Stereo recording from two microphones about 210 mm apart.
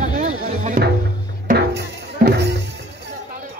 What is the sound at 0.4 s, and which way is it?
Music, 45° right (ahead or behind).